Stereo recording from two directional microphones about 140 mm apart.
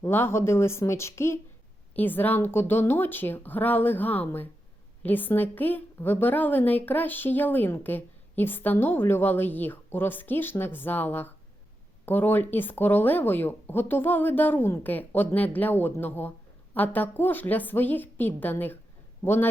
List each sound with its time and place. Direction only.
0.0 s a woman's voice: 15° left (ahead or behind)